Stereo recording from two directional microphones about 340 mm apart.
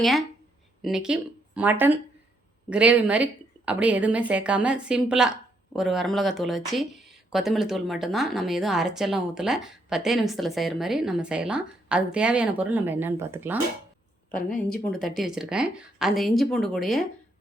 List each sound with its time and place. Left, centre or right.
0.0 s a woman's voice: centre
14.3 s speech: left
14.8 s a woman's voice: centre